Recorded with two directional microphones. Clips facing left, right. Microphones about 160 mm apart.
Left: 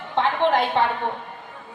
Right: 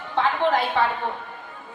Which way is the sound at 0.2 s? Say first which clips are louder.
Left 1 dB; 20° left (ahead or behind).